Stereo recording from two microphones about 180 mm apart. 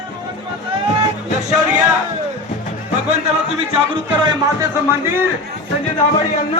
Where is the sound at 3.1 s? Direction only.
30° right (ahead or behind).